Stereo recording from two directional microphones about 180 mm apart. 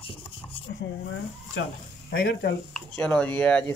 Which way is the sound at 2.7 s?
5° left (ahead or behind).